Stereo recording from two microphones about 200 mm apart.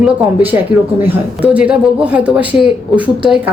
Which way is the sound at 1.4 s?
5° right (ahead or behind).